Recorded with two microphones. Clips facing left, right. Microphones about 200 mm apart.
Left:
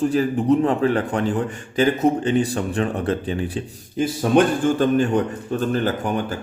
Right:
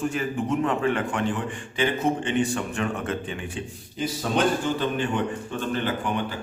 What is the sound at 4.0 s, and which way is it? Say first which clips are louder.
Speech: left 7 dB; 50° left (ahead or behind).